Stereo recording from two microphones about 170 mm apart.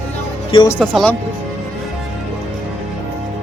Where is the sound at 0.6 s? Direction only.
10° left (ahead or behind).